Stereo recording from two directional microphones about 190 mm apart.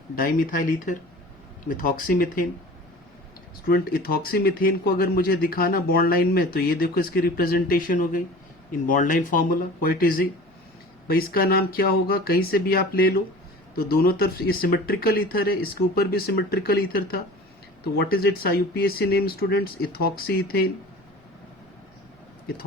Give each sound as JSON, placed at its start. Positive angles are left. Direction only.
{"t": 0.2, "sound": "speech", "side_deg": 45}
{"t": 3.7, "sound": "speech", "side_deg": 50}